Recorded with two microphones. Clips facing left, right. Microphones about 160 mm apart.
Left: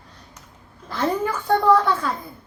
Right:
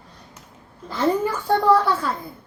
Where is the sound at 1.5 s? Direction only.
10° right (ahead or behind).